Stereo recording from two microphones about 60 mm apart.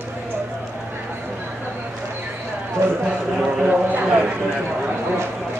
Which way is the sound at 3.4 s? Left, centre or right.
Right.